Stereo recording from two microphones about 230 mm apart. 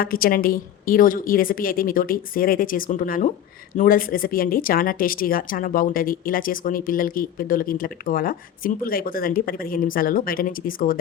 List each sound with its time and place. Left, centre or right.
0.0 s speech: left